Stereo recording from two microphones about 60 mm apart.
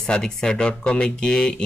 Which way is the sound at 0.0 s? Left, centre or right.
Centre.